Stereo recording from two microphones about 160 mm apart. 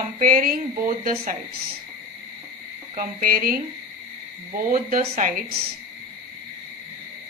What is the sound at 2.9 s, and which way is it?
Speech, 60° right (ahead or behind).